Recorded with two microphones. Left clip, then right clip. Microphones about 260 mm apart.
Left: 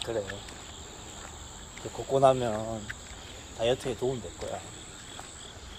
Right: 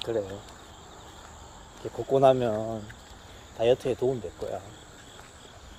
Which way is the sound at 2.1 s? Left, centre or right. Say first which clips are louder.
Right 2 dB; right.